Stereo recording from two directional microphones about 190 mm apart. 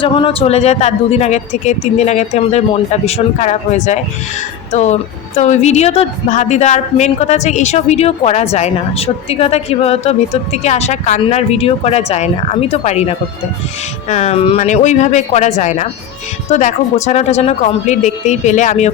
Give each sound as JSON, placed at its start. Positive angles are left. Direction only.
{"t": 0.0, "sound": "speech", "side_deg": 25}